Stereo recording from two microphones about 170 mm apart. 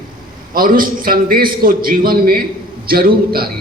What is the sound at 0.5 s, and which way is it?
A man's voice, 55° right (ahead or behind).